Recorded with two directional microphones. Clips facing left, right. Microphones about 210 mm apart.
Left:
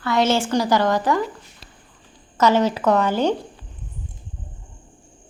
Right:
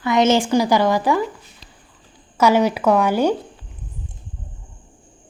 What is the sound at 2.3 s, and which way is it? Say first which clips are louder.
A woman's voice: right 2 dB; 10° right (ahead or behind).